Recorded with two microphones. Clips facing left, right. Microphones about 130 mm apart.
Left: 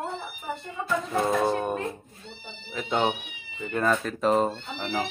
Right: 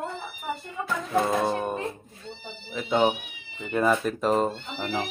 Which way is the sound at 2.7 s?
5° right (ahead or behind).